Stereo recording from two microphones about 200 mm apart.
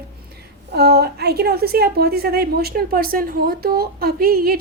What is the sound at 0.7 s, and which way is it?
A woman's voice, 55° right (ahead or behind).